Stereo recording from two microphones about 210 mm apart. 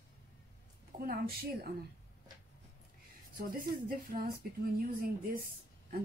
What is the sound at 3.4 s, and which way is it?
Speech, 45° right (ahead or behind).